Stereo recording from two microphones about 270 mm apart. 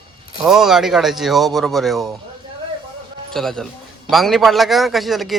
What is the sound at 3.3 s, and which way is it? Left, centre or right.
Speech, centre.